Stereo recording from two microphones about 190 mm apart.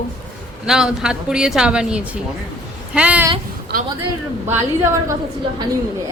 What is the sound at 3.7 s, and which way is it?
Speech, 60° right (ahead or behind).